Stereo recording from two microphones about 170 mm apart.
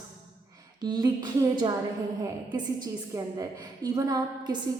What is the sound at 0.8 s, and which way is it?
Speech, 25° right (ahead or behind).